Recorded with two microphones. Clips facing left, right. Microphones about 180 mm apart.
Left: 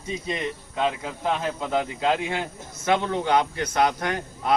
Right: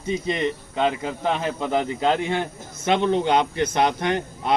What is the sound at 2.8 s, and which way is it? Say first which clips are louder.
Speech: right 3 dB; 20° right (ahead or behind).